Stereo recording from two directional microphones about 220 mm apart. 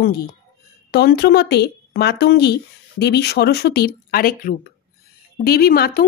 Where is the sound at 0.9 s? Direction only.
50° left (ahead or behind).